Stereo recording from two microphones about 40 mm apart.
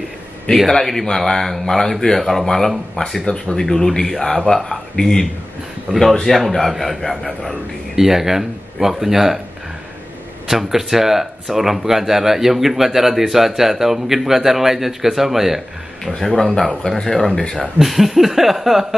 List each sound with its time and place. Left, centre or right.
0.7 s speech: centre
3.3 s speech: left
5.9 s speech: right
6.2 s a sound: centre
7.9 s speech: centre
10.5 s speech: centre
16.1 s speech: centre
17.4 s speech: left
17.7 s a sound: centre